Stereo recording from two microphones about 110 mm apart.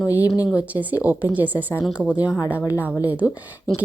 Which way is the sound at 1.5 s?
20° left (ahead or behind).